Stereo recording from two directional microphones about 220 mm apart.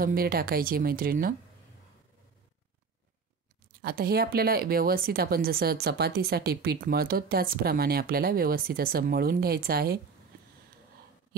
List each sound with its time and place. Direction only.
0.0 s speech: 40° right (ahead or behind)
3.8 s speech: 45° right (ahead or behind)